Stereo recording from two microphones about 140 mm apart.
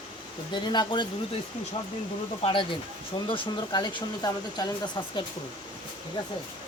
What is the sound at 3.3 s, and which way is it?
Speech, 35° left (ahead or behind).